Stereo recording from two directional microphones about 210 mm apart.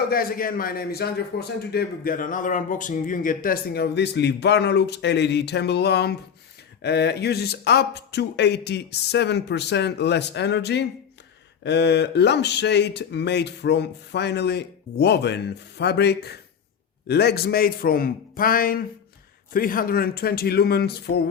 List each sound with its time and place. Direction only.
0.1 s a man's voice: 45° left (ahead or behind)